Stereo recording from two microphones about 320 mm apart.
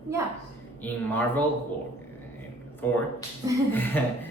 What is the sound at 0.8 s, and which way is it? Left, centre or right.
Speech, centre.